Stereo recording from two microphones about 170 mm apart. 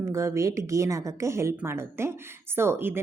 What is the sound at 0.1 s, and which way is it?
A woman's voice, 15° right (ahead or behind).